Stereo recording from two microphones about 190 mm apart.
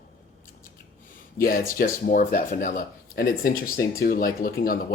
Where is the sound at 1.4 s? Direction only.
50° left (ahead or behind).